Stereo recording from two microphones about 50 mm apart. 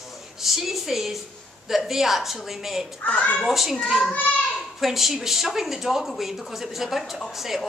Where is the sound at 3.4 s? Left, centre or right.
Centre.